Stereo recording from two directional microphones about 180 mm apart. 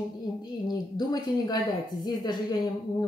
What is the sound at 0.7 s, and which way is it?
Speech, 20° left (ahead or behind).